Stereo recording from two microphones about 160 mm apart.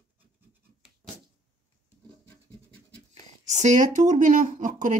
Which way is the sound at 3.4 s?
45° right (ahead or behind).